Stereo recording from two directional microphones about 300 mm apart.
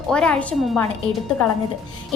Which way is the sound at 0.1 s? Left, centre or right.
Centre.